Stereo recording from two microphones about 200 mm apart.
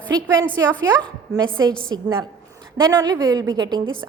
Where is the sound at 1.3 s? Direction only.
5° right (ahead or behind).